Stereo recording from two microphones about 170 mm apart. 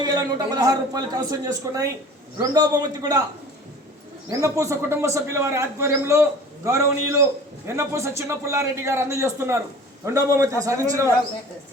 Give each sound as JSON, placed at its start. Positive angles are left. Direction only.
{"t": 0.0, "sound": "a man's voice", "side_deg": -25}
{"t": 4.3, "sound": "a man's voice", "side_deg": -20}